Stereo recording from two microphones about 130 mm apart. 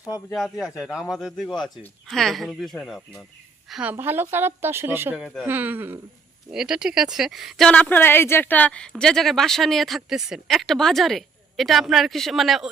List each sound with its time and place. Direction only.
0.3 s speech: centre (ahead or behind)
3.9 s speech: 15° right (ahead or behind)
5.2 s speech: centre (ahead or behind)
5.5 s speech: 15° right (ahead or behind)